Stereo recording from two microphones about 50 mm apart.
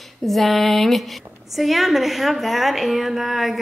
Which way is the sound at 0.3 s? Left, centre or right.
Centre.